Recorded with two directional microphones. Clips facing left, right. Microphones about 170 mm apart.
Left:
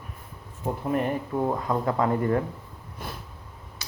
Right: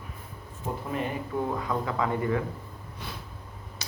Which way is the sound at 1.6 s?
45° left (ahead or behind).